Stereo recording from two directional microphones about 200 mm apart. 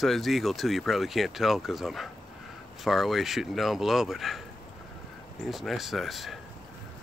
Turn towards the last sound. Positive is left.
turn(degrees=0)  # may be behind; listen again after turning